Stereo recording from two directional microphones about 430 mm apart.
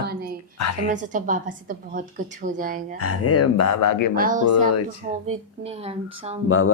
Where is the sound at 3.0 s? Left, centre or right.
Left.